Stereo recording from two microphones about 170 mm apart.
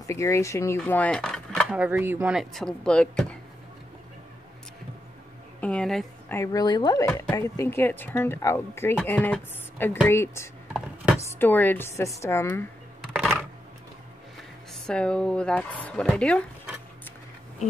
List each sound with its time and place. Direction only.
0.0 s speech: 15° left (ahead or behind)
1.7 s speech: 10° right (ahead or behind)
5.6 s speech: 5° left (ahead or behind)
6.3 s speech: 20° left (ahead or behind)
13.0 s a sound: centre (ahead or behind)
14.7 s speech: 5° left (ahead or behind)